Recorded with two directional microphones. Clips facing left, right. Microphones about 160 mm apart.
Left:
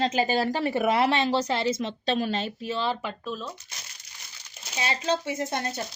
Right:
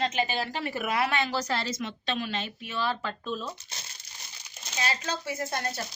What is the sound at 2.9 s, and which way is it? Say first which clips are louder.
Speech: left 2 dB; 15° left (ahead or behind).